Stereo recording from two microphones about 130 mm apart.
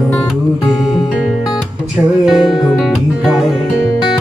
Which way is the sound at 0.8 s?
5° right (ahead or behind).